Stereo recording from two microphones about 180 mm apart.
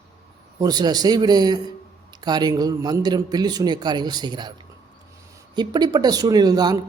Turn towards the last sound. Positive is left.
turn(degrees=-20)  # may be behind; listen again after turning